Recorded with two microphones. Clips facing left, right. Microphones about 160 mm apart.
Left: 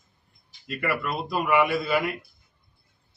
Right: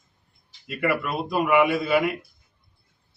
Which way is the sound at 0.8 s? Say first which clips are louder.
Right 3 dB; 10° right (ahead or behind).